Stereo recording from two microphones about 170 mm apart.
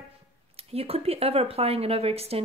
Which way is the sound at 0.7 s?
35° right (ahead or behind).